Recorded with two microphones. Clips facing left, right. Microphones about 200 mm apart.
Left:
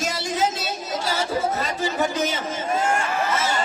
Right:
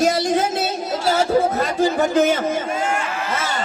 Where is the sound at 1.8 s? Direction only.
55° right (ahead or behind).